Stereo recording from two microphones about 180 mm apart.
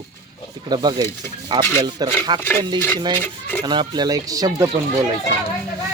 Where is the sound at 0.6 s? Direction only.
25° right (ahead or behind).